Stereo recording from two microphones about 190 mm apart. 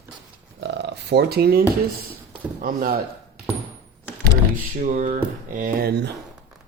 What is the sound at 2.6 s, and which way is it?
Speech, 50° right (ahead or behind).